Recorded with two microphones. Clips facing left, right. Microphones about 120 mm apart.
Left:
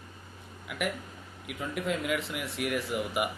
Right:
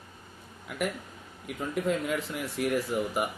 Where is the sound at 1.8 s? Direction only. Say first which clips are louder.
Right 1 dB; 40° right (ahead or behind).